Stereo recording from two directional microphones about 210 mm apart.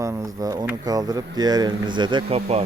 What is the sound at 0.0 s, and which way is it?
Speech, 15° right (ahead or behind).